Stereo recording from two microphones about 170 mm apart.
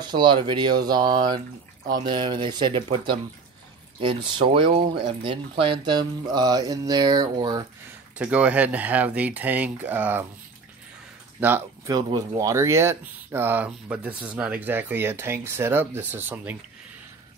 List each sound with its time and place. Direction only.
0.0 s speech: 25° right (ahead or behind)
8.2 s speech: 10° right (ahead or behind)
11.3 s speech: 10° right (ahead or behind)